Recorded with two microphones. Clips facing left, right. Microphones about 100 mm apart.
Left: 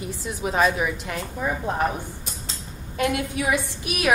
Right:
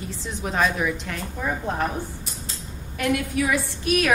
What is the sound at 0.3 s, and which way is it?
Speech, 5° left (ahead or behind).